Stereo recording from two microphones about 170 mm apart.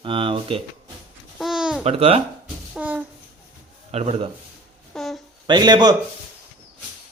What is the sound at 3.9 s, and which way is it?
Speech, 35° right (ahead or behind).